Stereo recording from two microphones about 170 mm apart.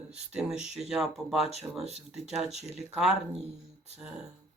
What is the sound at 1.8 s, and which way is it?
Speech, 40° right (ahead or behind).